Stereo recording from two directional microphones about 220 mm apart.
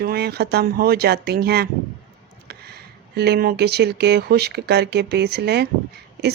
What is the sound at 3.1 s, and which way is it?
Speech, 45° right (ahead or behind).